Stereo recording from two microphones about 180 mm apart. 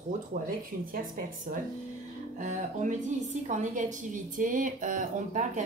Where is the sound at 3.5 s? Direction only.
45° right (ahead or behind).